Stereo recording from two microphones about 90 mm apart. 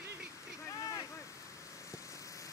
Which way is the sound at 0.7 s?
35° left (ahead or behind).